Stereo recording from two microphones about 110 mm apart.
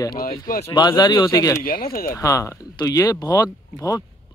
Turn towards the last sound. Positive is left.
turn(degrees=30)  # may be behind; listen again after turning